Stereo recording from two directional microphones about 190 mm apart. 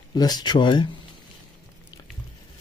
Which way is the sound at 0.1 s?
20° left (ahead or behind).